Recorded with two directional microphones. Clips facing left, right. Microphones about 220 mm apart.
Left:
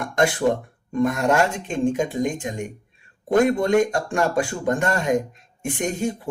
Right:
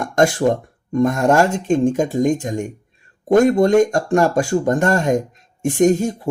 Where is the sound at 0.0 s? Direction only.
45° right (ahead or behind).